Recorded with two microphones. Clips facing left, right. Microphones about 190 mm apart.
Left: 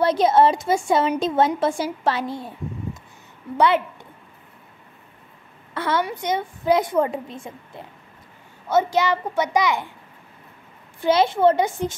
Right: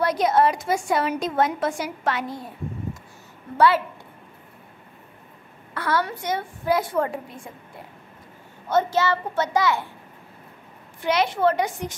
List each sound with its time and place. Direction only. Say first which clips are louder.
0.0 s a woman's voice: left 3 dB; 25° left (ahead or behind)
5.8 s a woman's voice: left 2 dB; 20° left (ahead or behind)
8.6 s a child's voice: left 2 dB; 10° left (ahead or behind)
11.1 s a woman's voice: left 4 dB; 25° left (ahead or behind)